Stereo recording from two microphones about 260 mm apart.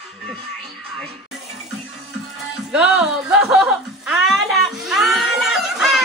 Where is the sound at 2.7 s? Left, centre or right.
Centre.